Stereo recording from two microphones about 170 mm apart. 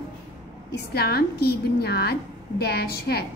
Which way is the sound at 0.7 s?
70° left (ahead or behind).